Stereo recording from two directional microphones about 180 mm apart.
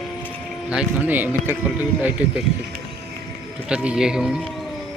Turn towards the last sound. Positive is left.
turn(degrees=-5)  # may be behind; listen again after turning